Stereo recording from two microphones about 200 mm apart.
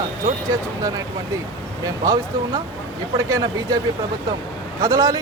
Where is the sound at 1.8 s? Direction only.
20° right (ahead or behind).